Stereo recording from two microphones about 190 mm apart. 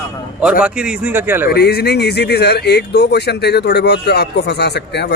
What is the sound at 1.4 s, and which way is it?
A man's voice, 55° left (ahead or behind).